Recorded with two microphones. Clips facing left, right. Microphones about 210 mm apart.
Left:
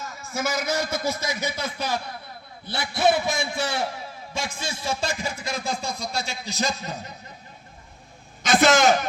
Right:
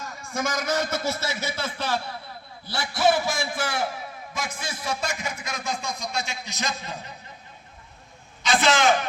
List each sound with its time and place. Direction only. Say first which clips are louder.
0.1 s a man's voice: left 1 dB; 5° left (ahead or behind); by 7.0 s 40° left (ahead or behind)
8.4 s a man's voice: left 3 dB; 45° left (ahead or behind)